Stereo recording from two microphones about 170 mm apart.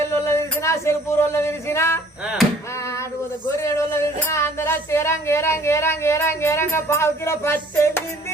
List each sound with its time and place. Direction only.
0.0 s speech: 15° left (ahead or behind)
2.2 s chop: 5° right (ahead or behind)
3.6 s speech: 15° left (ahead or behind)